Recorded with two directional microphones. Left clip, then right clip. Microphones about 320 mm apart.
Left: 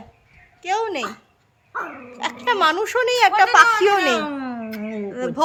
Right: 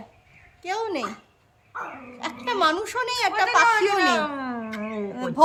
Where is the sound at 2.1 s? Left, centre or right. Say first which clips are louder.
Left 5 dB; centre.